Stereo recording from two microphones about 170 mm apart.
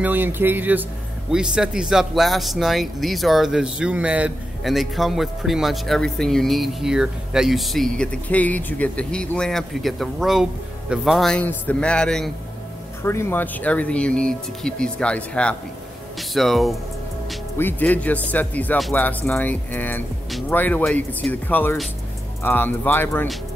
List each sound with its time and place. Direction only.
0.0 s speech: 10° right (ahead or behind); by 12.3 s 5° left (ahead or behind)
13.0 s speech: 15° left (ahead or behind)
17.6 s speech: 10° left (ahead or behind)
20.2 s music: centre (ahead or behind)
20.5 s speech: 10° left (ahead or behind)